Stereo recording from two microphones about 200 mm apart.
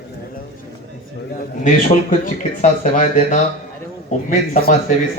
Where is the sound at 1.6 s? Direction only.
40° left (ahead or behind).